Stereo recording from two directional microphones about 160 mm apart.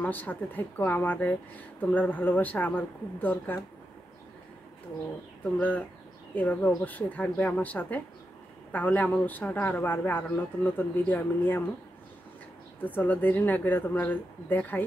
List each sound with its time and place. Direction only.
0.0 s speech: 10° left (ahead or behind)
5.4 s speech: 10° left (ahead or behind)
12.8 s speech: 10° left (ahead or behind)